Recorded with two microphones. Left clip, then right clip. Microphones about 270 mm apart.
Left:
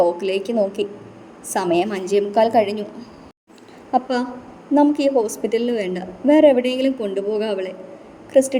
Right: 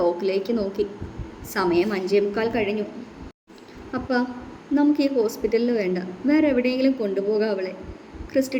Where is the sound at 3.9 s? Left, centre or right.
Left.